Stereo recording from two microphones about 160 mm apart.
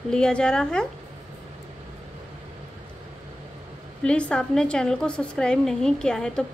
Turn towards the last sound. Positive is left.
turn(degrees=5)  # may be behind; listen again after turning